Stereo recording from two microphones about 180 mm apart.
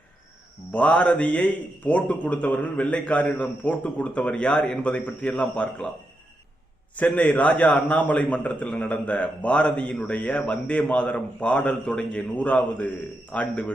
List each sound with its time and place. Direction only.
0.7 s a man's voice: 10° left (ahead or behind)
6.9 s a man's voice: 10° left (ahead or behind)